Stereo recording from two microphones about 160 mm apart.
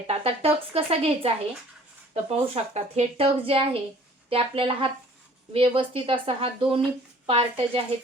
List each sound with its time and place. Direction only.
0.1 s speech: 40° right (ahead or behind)
2.3 s speech: 40° right (ahead or behind)